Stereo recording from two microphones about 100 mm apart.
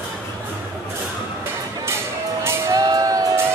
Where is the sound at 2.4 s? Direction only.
30° right (ahead or behind).